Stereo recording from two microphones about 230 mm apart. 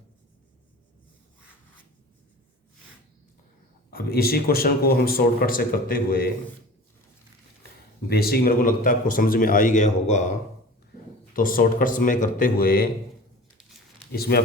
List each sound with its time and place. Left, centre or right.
3.9 s speech: left
8.1 s speech: left
11.3 s speech: left
14.1 s speech: left